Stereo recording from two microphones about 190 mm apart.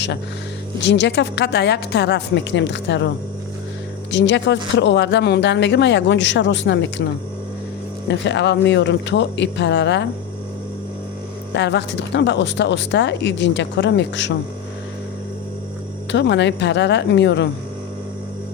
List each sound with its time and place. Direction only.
0.9 s a woman's voice: 65° left (ahead or behind)
4.1 s speech: 70° left (ahead or behind)
8.0 s speech: 65° left (ahead or behind)
11.5 s speech: 65° left (ahead or behind)
16.1 s speech: 65° left (ahead or behind)